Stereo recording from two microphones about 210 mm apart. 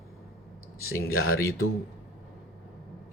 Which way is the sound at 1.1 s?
85° left.